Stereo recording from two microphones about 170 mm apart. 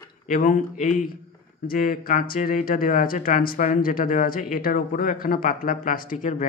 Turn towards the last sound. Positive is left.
turn(degrees=50)  # may be behind; listen again after turning